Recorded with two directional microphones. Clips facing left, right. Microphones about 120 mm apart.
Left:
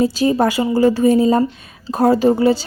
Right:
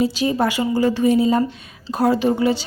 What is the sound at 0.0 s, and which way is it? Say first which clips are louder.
A woman's voice: left 4 dB; 40° left (ahead or behind).